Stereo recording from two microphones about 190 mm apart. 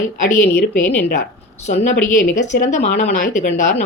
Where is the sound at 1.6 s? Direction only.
40° left (ahead or behind).